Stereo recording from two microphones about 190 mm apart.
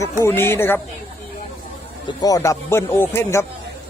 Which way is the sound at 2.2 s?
20° left (ahead or behind).